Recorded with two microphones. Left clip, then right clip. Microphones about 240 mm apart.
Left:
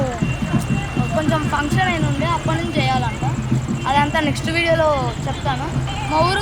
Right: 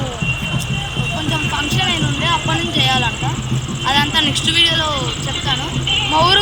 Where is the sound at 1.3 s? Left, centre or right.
Centre.